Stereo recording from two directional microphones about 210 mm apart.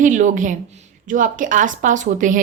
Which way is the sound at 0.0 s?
35° right (ahead or behind).